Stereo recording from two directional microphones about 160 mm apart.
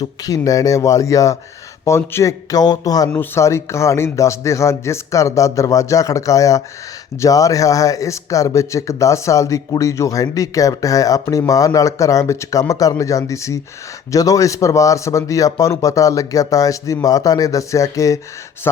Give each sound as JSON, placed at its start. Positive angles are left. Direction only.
{"t": 0.0, "sound": "speech", "side_deg": 25}